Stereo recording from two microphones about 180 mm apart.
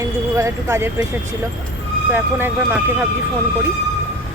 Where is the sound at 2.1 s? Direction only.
10° right (ahead or behind).